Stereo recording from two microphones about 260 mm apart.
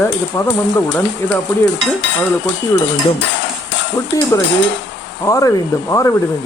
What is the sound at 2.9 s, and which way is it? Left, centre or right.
Dishes, left.